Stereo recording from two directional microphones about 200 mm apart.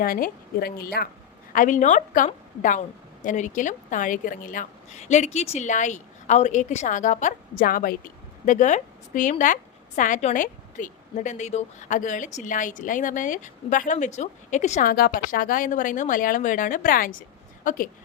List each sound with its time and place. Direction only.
0.0 s a woman's voice: 45° left (ahead or behind)